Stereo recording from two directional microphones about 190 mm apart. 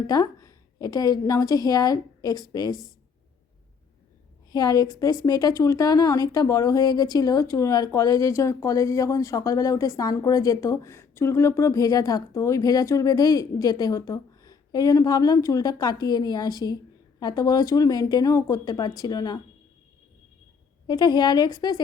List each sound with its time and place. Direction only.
0.1 s a woman's voice: 20° left (ahead or behind)
4.5 s speech: 20° left (ahead or behind)
20.8 s speech: 20° left (ahead or behind)